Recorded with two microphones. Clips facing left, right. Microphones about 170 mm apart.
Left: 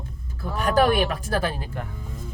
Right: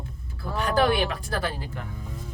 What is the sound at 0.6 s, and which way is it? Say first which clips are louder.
Speech: left 3 dB; 45° left (ahead or behind).